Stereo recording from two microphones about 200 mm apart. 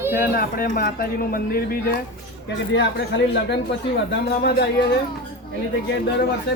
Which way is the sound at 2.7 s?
60° left (ahead or behind).